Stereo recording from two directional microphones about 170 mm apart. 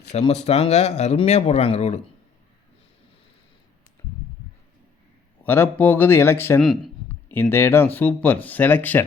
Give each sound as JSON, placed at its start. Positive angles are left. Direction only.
{"t": 0.1, "sound": "speech", "side_deg": 40}
{"t": 5.4, "sound": "speech", "side_deg": 10}
{"t": 6.6, "sound": "a man's voice", "side_deg": 0}
{"t": 7.3, "sound": "speech", "side_deg": 15}